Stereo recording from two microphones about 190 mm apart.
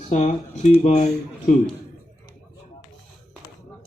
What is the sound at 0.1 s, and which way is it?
Speech, 35° left (ahead or behind).